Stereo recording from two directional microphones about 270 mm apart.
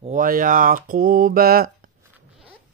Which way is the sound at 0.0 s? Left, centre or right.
Right.